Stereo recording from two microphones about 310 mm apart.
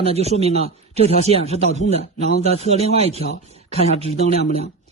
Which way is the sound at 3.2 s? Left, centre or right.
Centre.